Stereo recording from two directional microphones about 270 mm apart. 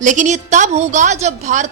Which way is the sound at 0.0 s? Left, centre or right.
Right.